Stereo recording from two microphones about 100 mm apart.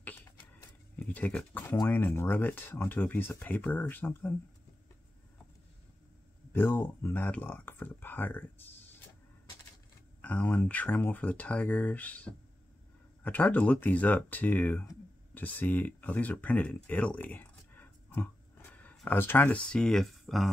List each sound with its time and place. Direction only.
0.0 s a sound: 20° left (ahead or behind)
1.0 s speech: 15° left (ahead or behind)
6.5 s speech: 25° left (ahead or behind)
10.2 s speech: 15° left (ahead or behind); by 20.5 s centre (ahead or behind)